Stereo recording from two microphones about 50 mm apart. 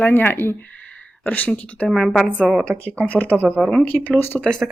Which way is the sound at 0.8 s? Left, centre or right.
Left.